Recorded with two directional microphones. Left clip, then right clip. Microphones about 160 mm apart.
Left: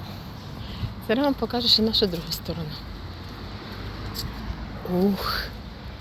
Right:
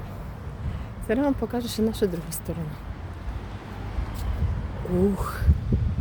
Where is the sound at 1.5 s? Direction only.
30° right (ahead or behind).